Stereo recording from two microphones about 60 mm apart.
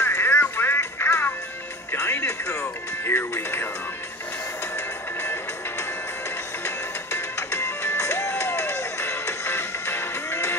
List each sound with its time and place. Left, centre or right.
0.0 s music: left
1.9 s speech: left
4.7 s music: left